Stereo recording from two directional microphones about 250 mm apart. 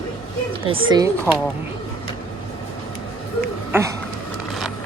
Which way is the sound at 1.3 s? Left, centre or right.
Centre.